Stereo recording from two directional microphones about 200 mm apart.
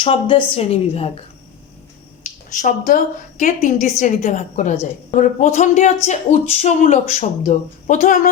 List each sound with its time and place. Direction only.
0.0 s a woman's voice: 25° left (ahead or behind)
2.2 s speech: 40° left (ahead or behind)